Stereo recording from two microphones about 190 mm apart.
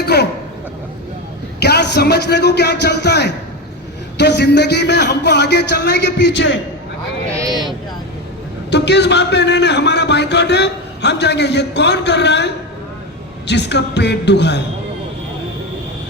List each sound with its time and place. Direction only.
0.0 s a sound: 60° left (ahead or behind)
1.5 s a man's voice: 60° left (ahead or behind)
8.7 s a man's voice: 65° left (ahead or behind)
13.5 s a man's voice: 65° left (ahead or behind)